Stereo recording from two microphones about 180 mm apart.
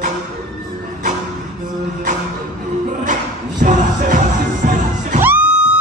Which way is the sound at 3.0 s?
45° right (ahead or behind).